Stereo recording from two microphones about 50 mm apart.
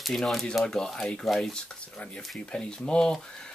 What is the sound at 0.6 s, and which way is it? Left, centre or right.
Speech, centre.